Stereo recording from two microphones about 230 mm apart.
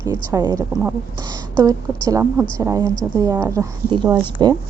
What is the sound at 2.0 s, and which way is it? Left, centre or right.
A woman's voice, centre.